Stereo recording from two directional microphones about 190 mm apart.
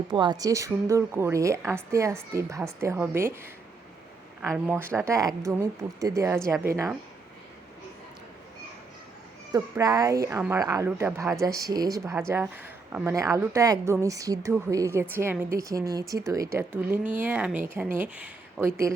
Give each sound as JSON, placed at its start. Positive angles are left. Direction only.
{"t": 0.1, "sound": "a woman's voice", "side_deg": -25}
{"t": 4.5, "sound": "a woman's voice", "side_deg": -10}
{"t": 9.5, "sound": "a woman's voice", "side_deg": -15}